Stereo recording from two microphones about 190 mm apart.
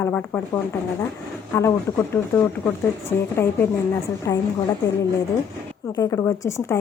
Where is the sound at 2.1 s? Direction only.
10° left (ahead or behind).